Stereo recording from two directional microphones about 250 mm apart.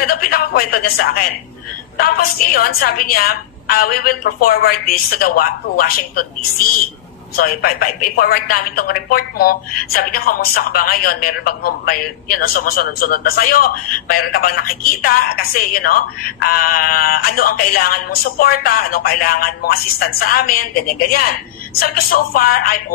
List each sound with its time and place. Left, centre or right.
0.0 s a sound: left
2.0 s a woman's voice: left
7.3 s a woman's voice: left